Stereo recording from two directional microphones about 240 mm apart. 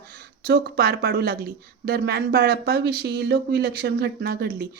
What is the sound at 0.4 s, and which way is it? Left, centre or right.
Speech, right.